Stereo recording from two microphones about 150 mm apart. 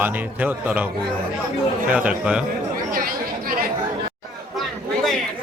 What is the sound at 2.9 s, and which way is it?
Chatter, 80° right.